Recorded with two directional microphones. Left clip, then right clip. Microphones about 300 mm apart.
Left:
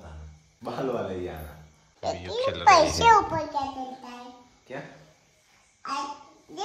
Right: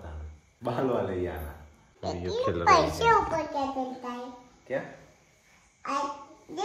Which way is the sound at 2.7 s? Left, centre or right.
Centre.